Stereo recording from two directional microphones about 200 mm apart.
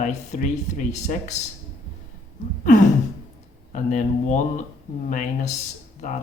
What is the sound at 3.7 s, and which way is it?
Speech, 40° left (ahead or behind).